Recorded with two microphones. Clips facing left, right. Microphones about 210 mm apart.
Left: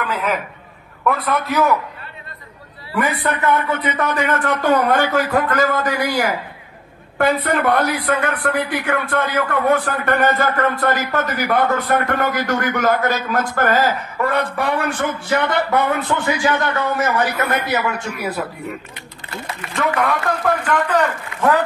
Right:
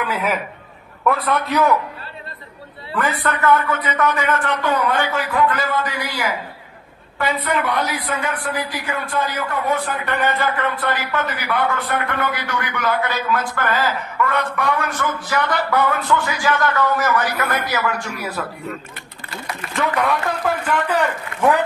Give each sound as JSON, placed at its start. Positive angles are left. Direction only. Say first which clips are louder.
{"t": 0.0, "sound": "a man's voice", "louder": "even", "side_deg": -10}
{"t": 3.0, "sound": "a man's voice", "louder": "left 1 dB", "side_deg": 15}
{"t": 3.8, "sound": "speech", "louder": "even", "side_deg": 30}
{"t": 4.6, "sound": "a man's voice", "louder": "left 5 dB", "side_deg": 50}
{"t": 19.7, "sound": "a man's voice", "louder": "left 1 dB", "side_deg": 0}